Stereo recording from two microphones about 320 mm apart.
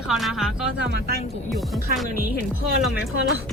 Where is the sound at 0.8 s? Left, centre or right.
Right.